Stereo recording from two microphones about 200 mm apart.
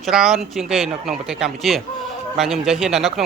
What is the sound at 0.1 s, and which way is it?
Speech, centre (ahead or behind).